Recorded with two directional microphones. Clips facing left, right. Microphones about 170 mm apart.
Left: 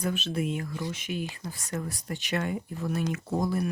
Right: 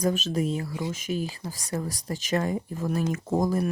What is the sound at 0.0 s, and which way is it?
Speech, 40° right (ahead or behind).